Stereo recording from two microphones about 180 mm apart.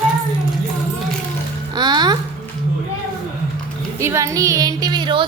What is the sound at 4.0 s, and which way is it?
Speech, 15° right (ahead or behind).